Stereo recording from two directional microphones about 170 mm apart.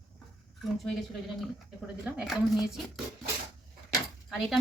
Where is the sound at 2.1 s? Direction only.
Centre (ahead or behind).